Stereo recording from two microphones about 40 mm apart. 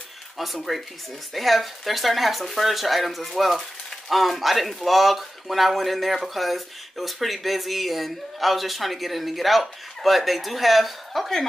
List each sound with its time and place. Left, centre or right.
0.4 s a man's voice: centre